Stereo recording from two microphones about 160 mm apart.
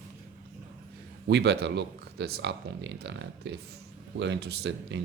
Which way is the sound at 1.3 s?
90° right.